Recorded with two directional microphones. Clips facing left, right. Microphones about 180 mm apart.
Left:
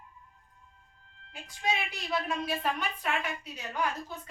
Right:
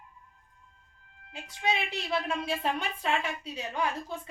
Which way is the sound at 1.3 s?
25° right (ahead or behind).